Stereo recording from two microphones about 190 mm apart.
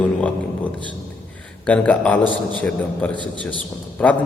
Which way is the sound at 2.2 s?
25° right (ahead or behind).